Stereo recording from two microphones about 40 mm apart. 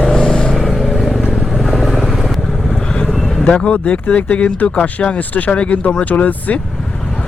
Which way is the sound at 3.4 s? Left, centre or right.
Left.